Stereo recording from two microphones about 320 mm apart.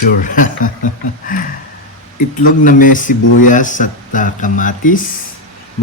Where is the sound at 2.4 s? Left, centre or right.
Left.